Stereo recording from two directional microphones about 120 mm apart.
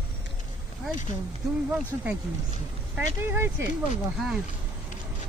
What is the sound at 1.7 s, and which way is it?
Speech, 10° right (ahead or behind).